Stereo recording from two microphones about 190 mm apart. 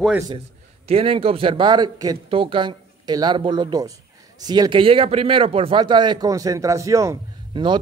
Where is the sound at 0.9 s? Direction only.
30° right (ahead or behind).